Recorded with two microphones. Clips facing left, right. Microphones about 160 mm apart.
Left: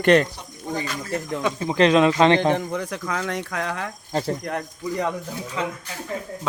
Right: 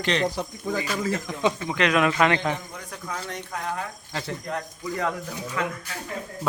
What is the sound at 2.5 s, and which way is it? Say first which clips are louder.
Speech: left 11 dB; 90° left.